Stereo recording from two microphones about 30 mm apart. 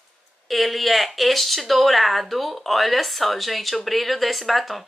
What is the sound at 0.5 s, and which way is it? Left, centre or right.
Speech, centre.